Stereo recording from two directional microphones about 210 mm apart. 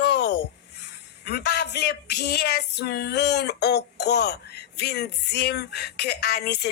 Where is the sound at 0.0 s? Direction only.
55° left (ahead or behind).